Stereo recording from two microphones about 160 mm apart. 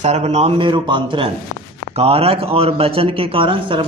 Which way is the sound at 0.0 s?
45° right (ahead or behind).